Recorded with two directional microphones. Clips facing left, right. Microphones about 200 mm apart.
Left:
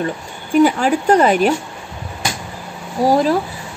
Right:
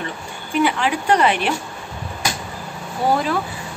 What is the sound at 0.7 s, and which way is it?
Speech, 40° left (ahead or behind).